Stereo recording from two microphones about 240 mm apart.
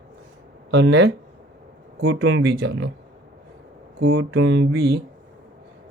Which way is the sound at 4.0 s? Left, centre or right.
Right.